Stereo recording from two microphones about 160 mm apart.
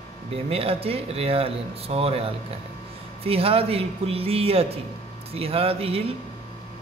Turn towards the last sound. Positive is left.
turn(degrees=-35)  # may be behind; listen again after turning